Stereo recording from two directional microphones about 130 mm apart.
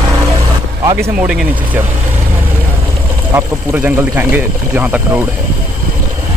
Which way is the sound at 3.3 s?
15° right (ahead or behind).